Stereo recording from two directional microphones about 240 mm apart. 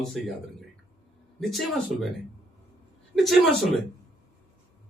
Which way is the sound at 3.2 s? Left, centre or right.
Centre.